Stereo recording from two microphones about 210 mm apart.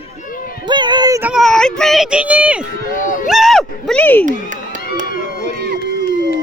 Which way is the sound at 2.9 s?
40° left (ahead or behind).